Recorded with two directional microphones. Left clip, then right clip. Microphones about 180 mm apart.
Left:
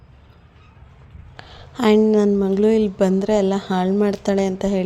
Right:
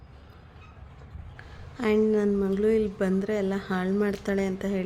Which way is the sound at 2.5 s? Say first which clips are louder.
Left 7 dB; 30° left (ahead or behind).